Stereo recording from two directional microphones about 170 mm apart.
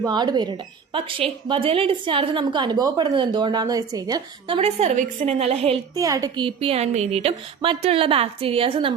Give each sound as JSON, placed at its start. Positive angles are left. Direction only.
{"t": 0.0, "sound": "a woman's voice", "side_deg": -25}
{"t": 5.9, "sound": "a woman's voice", "side_deg": -20}